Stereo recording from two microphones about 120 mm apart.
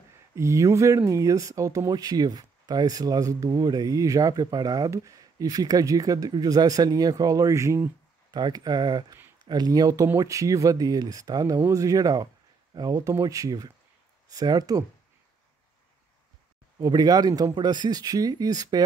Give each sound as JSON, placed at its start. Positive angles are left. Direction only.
{"t": 0.4, "sound": "speech", "side_deg": -25}
{"t": 8.4, "sound": "speech", "side_deg": -35}
{"t": 16.8, "sound": "speech", "side_deg": -35}